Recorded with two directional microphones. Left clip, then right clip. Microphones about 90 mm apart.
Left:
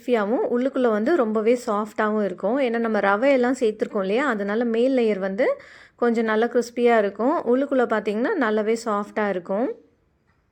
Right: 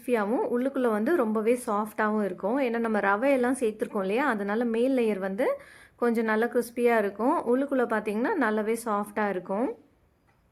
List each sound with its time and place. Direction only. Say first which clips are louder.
0.0 s a woman's voice: left 5 dB; 30° left (ahead or behind)
0.3 s speech: left 5 dB; 15° left (ahead or behind)
0.5 s a woman's voice: left 5 dB; 30° left (ahead or behind)
9.5 s speech: left 5 dB; 10° left (ahead or behind)